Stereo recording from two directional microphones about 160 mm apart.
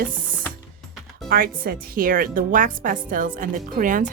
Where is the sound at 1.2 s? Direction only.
65° right (ahead or behind).